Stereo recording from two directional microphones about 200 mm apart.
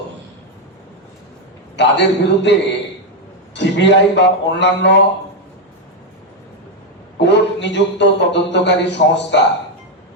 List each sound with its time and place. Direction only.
1.7 s speech: 60° left (ahead or behind)
7.2 s speech: 60° left (ahead or behind)